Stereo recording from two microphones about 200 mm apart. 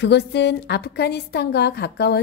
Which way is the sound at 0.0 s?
60° left (ahead or behind).